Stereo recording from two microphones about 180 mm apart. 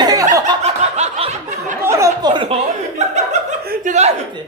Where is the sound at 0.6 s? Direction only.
40° right (ahead or behind).